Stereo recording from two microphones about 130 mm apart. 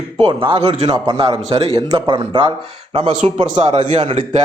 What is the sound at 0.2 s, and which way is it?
Speech, 45° right (ahead or behind).